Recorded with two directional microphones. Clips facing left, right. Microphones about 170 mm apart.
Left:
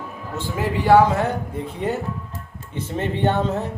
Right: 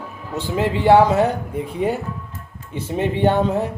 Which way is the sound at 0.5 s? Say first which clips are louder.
Right 2 dB; 20° right (ahead or behind).